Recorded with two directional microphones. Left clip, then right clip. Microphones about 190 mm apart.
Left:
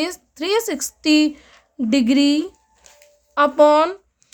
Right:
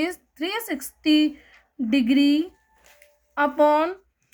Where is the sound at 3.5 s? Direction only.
55° left (ahead or behind).